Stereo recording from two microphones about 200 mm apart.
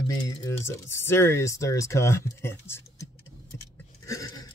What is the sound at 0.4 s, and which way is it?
Speech, 15° left (ahead or behind).